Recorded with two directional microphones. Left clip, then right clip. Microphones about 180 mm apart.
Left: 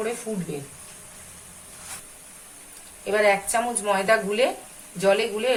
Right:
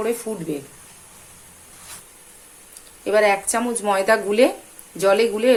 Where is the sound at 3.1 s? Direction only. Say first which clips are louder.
Right 3 dB; 60° right (ahead or behind).